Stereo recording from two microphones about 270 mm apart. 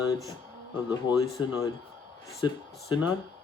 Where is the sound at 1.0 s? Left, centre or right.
Centre.